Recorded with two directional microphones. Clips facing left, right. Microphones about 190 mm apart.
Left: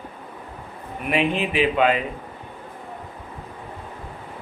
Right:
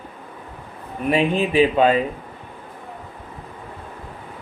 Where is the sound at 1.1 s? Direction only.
35° right (ahead or behind).